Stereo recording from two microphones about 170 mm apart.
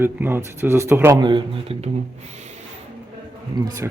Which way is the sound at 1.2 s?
30° right (ahead or behind).